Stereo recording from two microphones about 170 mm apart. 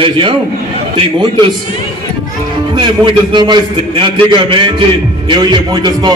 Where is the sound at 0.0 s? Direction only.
30° right (ahead or behind).